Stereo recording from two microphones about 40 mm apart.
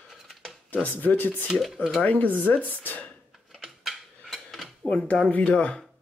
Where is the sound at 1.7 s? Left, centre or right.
Centre.